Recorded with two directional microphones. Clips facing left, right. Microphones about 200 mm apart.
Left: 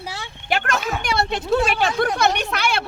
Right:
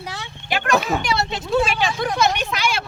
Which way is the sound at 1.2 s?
55° left (ahead or behind).